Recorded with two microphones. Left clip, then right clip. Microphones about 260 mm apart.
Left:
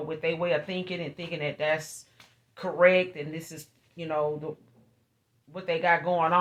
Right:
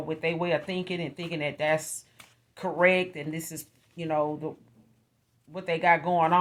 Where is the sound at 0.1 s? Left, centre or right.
Right.